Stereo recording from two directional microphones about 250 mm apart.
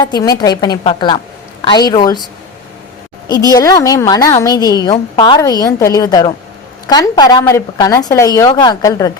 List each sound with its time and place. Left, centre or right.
0.0 s a woman's voice: centre
3.2 s a woman's voice: centre